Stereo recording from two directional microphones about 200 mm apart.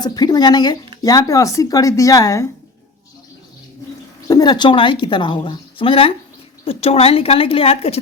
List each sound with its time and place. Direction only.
0.0 s a woman's voice: 20° left (ahead or behind)
4.3 s a woman's voice: 20° left (ahead or behind)